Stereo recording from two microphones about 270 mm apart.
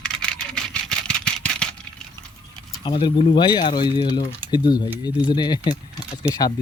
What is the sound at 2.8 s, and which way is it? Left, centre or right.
Speech, centre.